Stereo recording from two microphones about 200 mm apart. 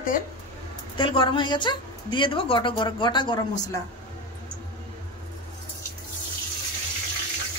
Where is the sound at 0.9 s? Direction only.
25° left (ahead or behind).